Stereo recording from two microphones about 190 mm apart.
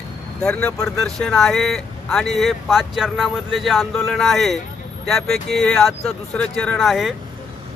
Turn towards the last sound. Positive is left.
turn(degrees=0)  # may be behind; listen again after turning